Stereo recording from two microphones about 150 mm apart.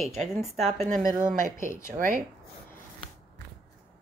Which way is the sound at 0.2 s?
Centre (ahead or behind).